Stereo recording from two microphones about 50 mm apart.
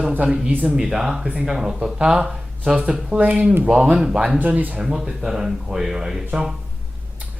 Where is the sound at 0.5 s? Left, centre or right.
Right.